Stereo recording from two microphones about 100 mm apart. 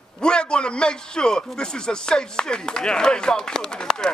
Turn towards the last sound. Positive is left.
turn(degrees=5)  # may be behind; listen again after turning